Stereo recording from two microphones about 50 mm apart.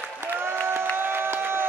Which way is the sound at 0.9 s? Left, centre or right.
Right.